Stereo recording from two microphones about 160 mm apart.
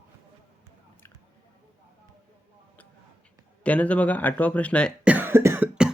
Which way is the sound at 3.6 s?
10° left (ahead or behind).